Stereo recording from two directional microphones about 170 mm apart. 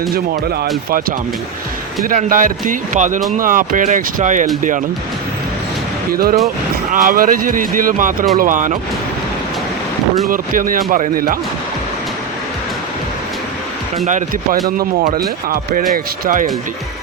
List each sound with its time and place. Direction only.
0.1 s speech: 65° right (ahead or behind)
2.0 s speech: 50° right (ahead or behind)
6.1 s speech: 60° right (ahead or behind)
10.2 s speech: 55° right (ahead or behind)
14.1 s speech: 45° right (ahead or behind)
14.8 s speech: 60° right (ahead or behind)